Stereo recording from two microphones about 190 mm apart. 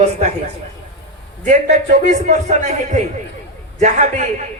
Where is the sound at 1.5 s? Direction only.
40° right (ahead or behind).